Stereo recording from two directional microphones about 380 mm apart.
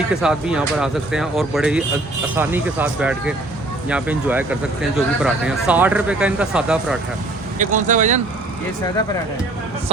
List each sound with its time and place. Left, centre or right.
0.2 s speech: centre
7.6 s speech: centre